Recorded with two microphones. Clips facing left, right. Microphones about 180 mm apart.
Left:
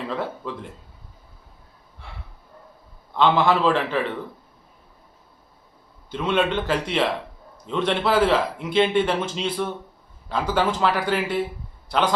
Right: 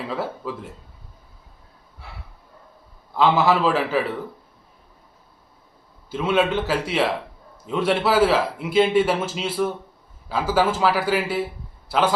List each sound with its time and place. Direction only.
0.1 s speech: 5° right (ahead or behind)
2.0 s a sound: 5° right (ahead or behind)
3.2 s a man's voice: 5° right (ahead or behind)
6.1 s a man's voice: 5° right (ahead or behind)